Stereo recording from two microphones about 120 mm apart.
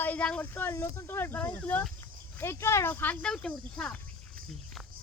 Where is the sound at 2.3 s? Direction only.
20° left (ahead or behind).